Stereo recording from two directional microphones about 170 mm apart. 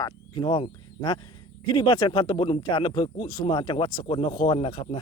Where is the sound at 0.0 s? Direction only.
25° left (ahead or behind).